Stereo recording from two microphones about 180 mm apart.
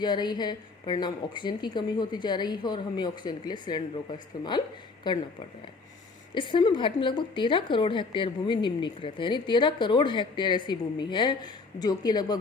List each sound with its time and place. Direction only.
0.0 s a woman's voice: 25° left (ahead or behind)
5.1 s a woman's voice: 25° left (ahead or behind)
6.3 s a woman's voice: 30° left (ahead or behind)